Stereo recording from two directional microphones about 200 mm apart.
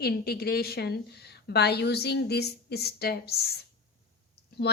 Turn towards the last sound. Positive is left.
turn(degrees=55)  # may be behind; listen again after turning